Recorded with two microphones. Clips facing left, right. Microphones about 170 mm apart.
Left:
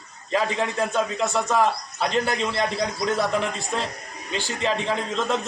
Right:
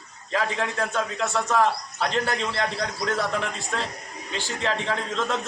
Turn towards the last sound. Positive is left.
turn(degrees=15)  # may be behind; listen again after turning